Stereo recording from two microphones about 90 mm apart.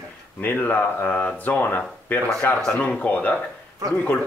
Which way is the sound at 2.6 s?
10° left (ahead or behind).